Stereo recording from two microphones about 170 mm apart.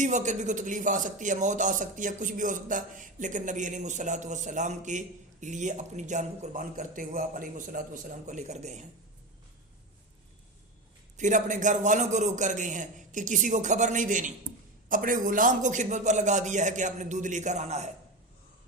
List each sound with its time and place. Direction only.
0.0 s speech: 45° right (ahead or behind)
11.2 s speech: 50° right (ahead or behind)